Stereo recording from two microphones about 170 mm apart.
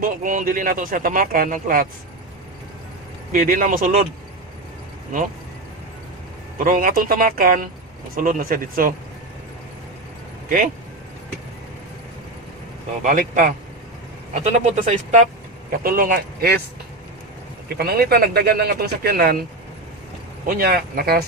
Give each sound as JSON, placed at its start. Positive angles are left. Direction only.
{"t": 0.0, "sound": "speech", "side_deg": -55}
{"t": 3.3, "sound": "speech", "side_deg": -55}
{"t": 6.6, "sound": "speech", "side_deg": -55}
{"t": 13.0, "sound": "speech", "side_deg": -50}
{"t": 15.7, "sound": "speech", "side_deg": -60}
{"t": 17.6, "sound": "speech", "side_deg": -65}
{"t": 20.4, "sound": "speech", "side_deg": -60}